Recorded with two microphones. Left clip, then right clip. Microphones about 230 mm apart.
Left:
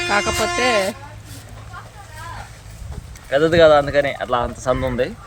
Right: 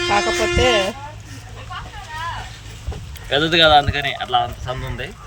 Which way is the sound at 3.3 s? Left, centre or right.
Left.